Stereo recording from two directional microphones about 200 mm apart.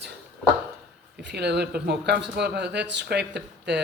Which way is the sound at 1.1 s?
60° right (ahead or behind).